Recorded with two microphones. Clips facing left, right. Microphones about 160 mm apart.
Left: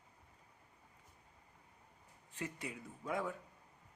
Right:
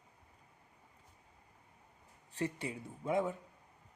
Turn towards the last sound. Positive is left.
turn(degrees=-25)  # may be behind; listen again after turning